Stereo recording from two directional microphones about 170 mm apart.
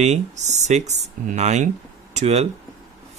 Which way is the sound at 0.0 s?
40° right (ahead or behind).